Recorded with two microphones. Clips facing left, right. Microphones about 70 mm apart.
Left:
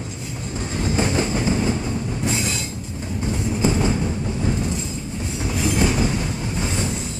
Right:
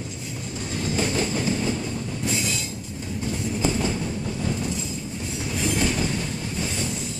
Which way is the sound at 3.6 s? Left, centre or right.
Left.